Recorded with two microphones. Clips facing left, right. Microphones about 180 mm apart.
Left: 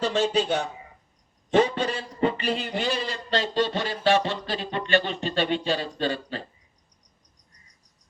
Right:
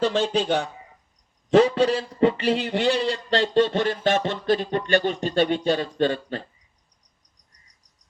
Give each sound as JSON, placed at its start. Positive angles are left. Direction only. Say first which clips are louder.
{"t": 0.0, "sound": "a man's voice", "louder": "right 1 dB", "side_deg": -55}
{"t": 1.5, "sound": "a man's voice", "louder": "right 5 dB", "side_deg": -85}